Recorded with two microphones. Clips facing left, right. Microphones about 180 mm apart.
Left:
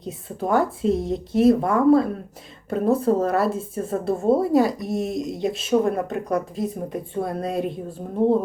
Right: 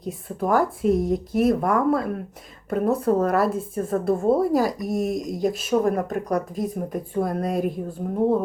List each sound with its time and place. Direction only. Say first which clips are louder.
0.0 s speech: right 1 dB; 25° left (ahead or behind)